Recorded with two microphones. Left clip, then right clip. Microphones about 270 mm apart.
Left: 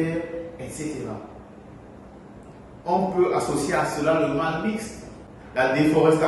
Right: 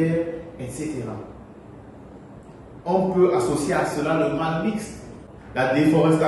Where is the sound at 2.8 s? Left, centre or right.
Centre.